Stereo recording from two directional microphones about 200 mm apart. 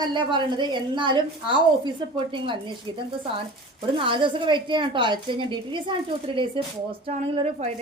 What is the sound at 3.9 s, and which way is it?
A woman's voice, 25° right (ahead or behind).